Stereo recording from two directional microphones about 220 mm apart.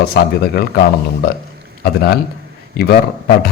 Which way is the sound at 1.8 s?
45° left (ahead or behind).